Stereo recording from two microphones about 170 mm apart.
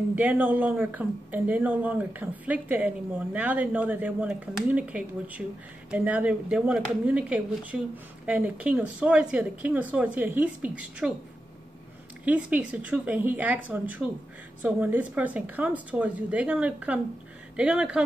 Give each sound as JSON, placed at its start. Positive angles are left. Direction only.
{"t": 0.1, "sound": "speech", "side_deg": -10}
{"t": 12.3, "sound": "speech", "side_deg": -10}